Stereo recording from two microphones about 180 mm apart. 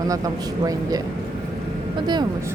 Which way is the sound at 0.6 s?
20° right (ahead or behind).